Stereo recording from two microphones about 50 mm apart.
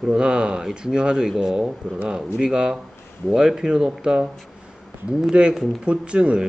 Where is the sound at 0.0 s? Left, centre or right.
Centre.